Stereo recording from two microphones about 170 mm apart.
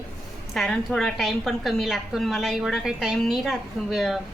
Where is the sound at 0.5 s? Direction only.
Centre (ahead or behind).